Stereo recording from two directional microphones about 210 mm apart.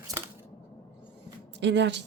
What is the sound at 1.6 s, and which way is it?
Speech, 55° right (ahead or behind).